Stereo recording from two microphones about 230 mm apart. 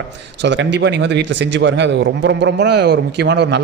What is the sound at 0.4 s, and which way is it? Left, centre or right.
A man's voice, right.